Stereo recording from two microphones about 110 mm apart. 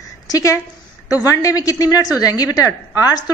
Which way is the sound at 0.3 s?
30° left (ahead or behind).